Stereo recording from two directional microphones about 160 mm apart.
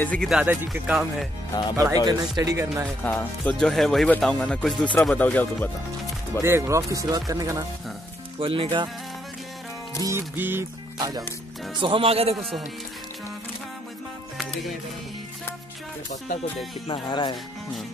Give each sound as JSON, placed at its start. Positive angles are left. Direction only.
{"t": 0.0, "sound": "speech", "side_deg": 5}
{"t": 0.3, "sound": "music", "side_deg": -10}
{"t": 0.9, "sound": "speech", "side_deg": 0}
{"t": 1.8, "sound": "speech", "side_deg": -25}
{"t": 3.0, "sound": "speech", "side_deg": 10}
{"t": 6.4, "sound": "speech", "side_deg": -15}
{"t": 8.4, "sound": "speech", "side_deg": -35}
{"t": 10.0, "sound": "music", "side_deg": -15}
{"t": 11.8, "sound": "speech", "side_deg": -35}
{"t": 14.4, "sound": "music", "side_deg": 5}
{"t": 16.8, "sound": "speech", "side_deg": 30}